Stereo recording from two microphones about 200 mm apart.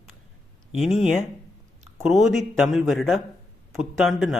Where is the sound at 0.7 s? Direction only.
Centre (ahead or behind).